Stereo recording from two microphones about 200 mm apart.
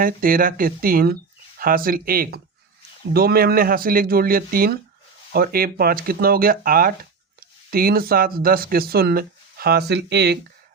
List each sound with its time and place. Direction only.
0.0 s speech: 45° right (ahead or behind)